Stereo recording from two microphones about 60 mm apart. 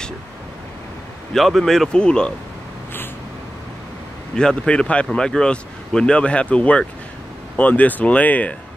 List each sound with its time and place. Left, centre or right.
1.3 s speech: centre
4.4 s speech: centre